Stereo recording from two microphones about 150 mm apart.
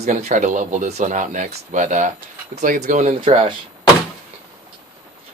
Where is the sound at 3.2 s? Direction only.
40° right (ahead or behind).